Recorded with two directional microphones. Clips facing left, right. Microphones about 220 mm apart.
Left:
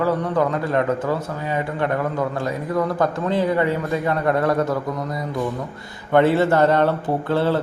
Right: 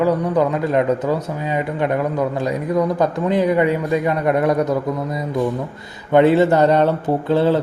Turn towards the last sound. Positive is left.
turn(degrees=-20)  # may be behind; listen again after turning